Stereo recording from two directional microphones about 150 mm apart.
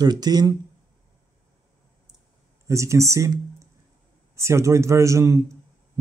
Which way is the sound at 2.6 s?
20° right (ahead or behind).